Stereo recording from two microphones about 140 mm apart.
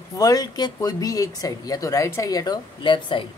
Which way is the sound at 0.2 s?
25° left (ahead or behind).